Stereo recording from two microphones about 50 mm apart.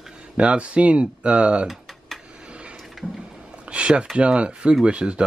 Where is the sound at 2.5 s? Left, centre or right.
Right.